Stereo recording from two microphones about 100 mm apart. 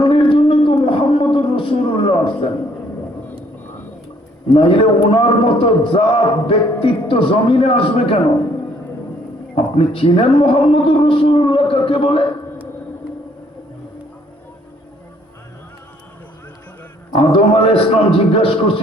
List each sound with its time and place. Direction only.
0.0 s a sound: 65° left (ahead or behind)
4.5 s a man's voice: 65° left (ahead or behind)
9.6 s speech: 65° left (ahead or behind)
17.2 s speech: 70° left (ahead or behind)